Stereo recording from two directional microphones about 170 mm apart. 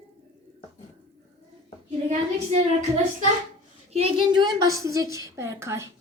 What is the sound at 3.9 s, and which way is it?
A woman's voice, 30° right (ahead or behind).